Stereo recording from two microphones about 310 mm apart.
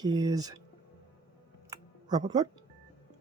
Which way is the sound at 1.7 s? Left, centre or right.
Centre.